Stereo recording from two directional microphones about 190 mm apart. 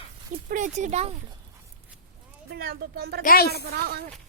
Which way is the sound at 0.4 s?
40° right (ahead or behind).